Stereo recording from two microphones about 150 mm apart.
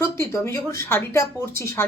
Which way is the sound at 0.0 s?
15° left (ahead or behind).